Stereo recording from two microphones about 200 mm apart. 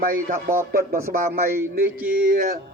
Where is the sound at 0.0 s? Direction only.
45° right (ahead or behind).